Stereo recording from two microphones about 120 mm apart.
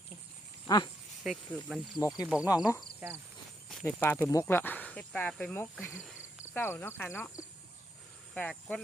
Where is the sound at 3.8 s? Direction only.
15° left (ahead or behind).